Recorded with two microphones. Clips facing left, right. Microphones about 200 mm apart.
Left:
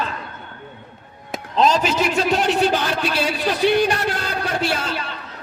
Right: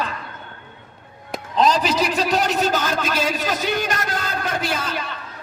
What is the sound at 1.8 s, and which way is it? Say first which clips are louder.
A man's voice: left 1 dB; 35° right (ahead or behind).